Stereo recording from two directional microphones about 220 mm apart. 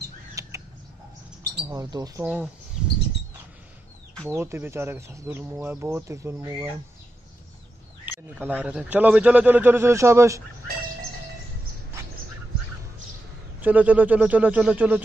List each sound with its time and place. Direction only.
0.4 s creak: 15° right (ahead or behind)
1.6 s speech: 15° right (ahead or behind)
2.2 s speech: 5° right (ahead or behind)
4.3 s speech: 10° right (ahead or behind)
8.0 s speech: 10° right (ahead or behind)
13.6 s speech: 5° right (ahead or behind)